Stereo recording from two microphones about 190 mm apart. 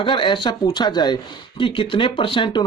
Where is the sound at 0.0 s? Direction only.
25° left (ahead or behind).